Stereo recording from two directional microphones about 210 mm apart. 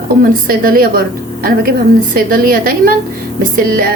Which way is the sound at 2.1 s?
40° right (ahead or behind).